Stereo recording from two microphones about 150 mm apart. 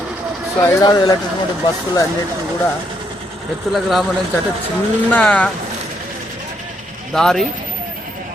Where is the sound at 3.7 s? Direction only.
Centre (ahead or behind).